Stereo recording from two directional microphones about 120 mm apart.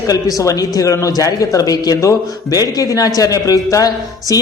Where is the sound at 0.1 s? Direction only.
30° left (ahead or behind).